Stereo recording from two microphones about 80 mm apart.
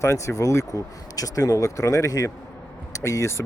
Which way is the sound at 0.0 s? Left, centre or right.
Left.